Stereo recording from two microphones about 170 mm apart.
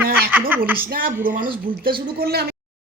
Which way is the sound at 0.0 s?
10° right (ahead or behind).